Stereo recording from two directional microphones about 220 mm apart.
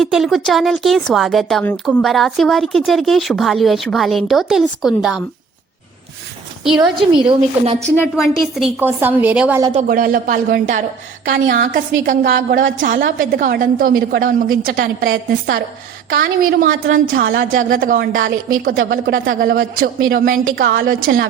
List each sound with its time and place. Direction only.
0.0 s speech: centre (ahead or behind)
7.3 s speech: 25° right (ahead or behind)
8.1 s a woman's voice: centre (ahead or behind)
9.8 s a woman's voice: 40° right (ahead or behind)